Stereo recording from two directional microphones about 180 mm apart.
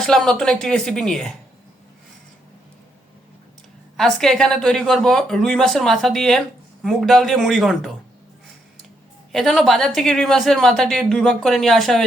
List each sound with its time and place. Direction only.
0.0 s a woman's voice: centre (ahead or behind)
3.9 s a woman's voice: centre (ahead or behind)
9.3 s a woman's voice: centre (ahead or behind)